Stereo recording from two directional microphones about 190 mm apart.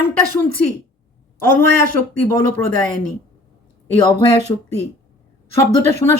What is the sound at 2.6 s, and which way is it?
Speech, 10° left (ahead or behind).